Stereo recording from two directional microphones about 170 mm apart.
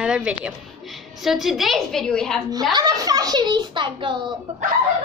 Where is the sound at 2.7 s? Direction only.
20° right (ahead or behind).